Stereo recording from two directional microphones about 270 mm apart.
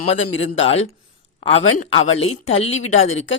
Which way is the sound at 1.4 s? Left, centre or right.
Left.